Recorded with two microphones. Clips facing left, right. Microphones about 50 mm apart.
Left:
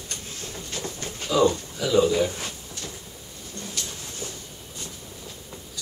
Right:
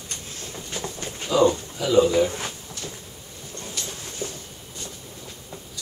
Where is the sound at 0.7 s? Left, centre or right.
Right.